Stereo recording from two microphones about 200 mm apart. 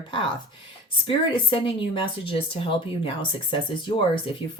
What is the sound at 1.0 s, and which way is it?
Speech, 25° left (ahead or behind).